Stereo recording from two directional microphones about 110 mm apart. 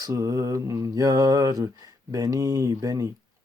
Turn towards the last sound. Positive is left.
turn(degrees=-30)  # may be behind; listen again after turning